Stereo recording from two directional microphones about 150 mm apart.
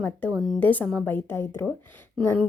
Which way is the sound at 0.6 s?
10° left (ahead or behind).